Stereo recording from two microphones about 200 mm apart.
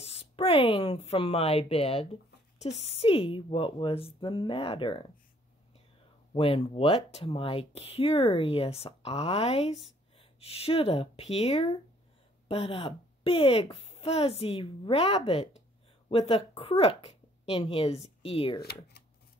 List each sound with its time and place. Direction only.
0.0 s speech: 30° left (ahead or behind)
6.3 s speech: 25° left (ahead or behind)